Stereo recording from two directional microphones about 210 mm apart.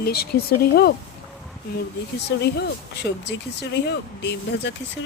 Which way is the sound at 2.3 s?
50° left (ahead or behind).